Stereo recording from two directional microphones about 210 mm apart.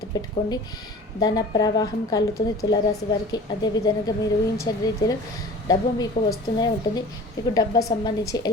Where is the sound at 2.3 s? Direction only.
45° left (ahead or behind).